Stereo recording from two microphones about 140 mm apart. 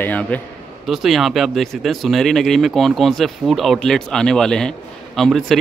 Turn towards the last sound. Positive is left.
turn(degrees=0)  # may be behind; listen again after turning